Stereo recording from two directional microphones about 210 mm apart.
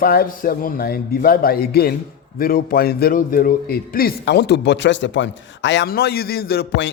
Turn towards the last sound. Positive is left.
turn(degrees=55)  # may be behind; listen again after turning